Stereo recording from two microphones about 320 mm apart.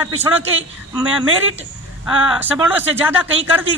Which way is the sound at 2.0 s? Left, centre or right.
Centre.